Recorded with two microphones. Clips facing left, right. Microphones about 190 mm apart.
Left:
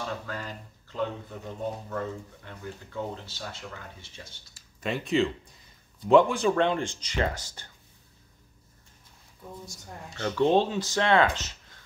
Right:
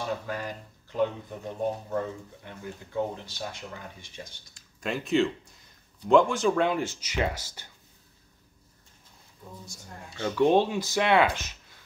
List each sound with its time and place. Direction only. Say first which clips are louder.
0.0 s speech: right 3 dB; 15° right (ahead or behind)
2.4 s speech: even; 15° right (ahead or behind)
4.6 s speech: even; centre (ahead or behind)
10.0 s speech: right 1 dB; 10° right (ahead or behind)